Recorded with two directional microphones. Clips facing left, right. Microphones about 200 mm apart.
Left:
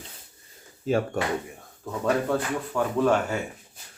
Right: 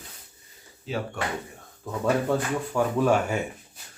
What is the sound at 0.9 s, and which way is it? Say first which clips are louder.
Speech: left 7 dB; 50° left (ahead or behind).